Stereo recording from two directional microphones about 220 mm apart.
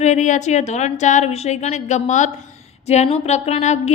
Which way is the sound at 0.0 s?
35° left (ahead or behind).